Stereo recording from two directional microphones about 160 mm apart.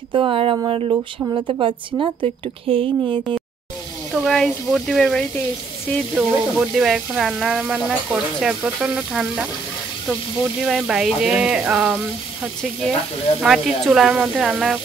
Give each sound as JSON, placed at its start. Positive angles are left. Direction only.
{"t": 0.1, "sound": "a woman's voice", "side_deg": -30}
{"t": 4.1, "sound": "speech", "side_deg": 0}
{"t": 10.6, "sound": "speech", "side_deg": -5}
{"t": 13.4, "sound": "speech", "side_deg": -5}